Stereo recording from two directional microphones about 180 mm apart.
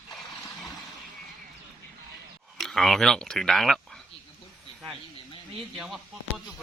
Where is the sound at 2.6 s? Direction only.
Centre (ahead or behind).